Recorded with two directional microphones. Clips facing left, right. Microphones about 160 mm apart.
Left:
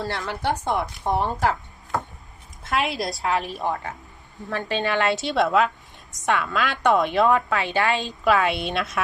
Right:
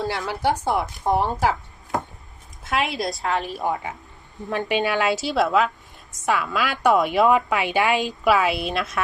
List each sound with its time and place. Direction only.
0.0 s a woman's voice: 10° right (ahead or behind)
2.6 s a woman's voice: centre (ahead or behind)
4.4 s a woman's voice: 15° right (ahead or behind); by 9.0 s centre (ahead or behind)